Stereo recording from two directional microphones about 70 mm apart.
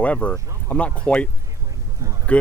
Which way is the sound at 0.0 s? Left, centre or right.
Centre.